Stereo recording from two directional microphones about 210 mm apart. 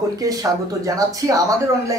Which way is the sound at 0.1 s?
15° right (ahead or behind).